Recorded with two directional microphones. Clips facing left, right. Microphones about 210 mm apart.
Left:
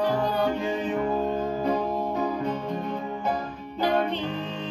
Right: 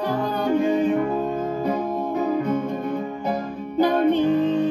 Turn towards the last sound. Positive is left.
turn(degrees=-50)  # may be behind; listen again after turning